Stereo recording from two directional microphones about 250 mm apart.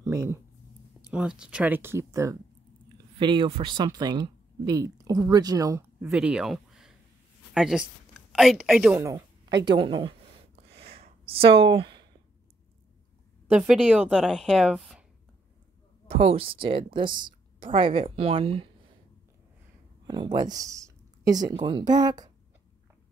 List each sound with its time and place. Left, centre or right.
0.0 s a sound: centre
1.1 s a woman's voice: centre
9.7 s a sound: centre
13.6 s a woman's voice: centre
16.1 s a woman's voice: right
20.1 s speech: centre